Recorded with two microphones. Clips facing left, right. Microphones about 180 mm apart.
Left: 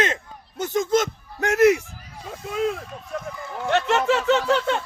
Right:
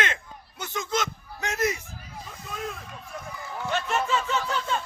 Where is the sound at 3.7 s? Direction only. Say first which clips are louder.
Left 7 dB; 75° left (ahead or behind).